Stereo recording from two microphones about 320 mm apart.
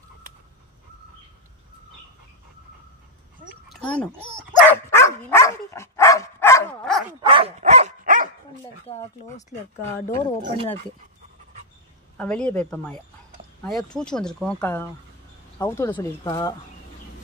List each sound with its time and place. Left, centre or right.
3.6 s a sound: centre
4.6 s dog: centre
7.2 s dog: centre
10.1 s speech: centre
12.2 s speech: centre